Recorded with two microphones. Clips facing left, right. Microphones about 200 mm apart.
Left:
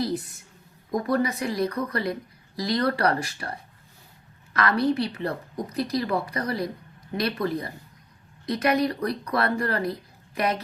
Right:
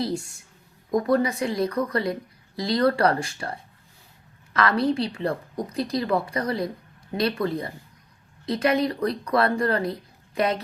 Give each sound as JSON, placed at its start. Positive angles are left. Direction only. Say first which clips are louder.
{"t": 0.0, "sound": "speech", "louder": "even", "side_deg": -30}
{"t": 4.5, "sound": "speech", "louder": "right 1 dB", "side_deg": -25}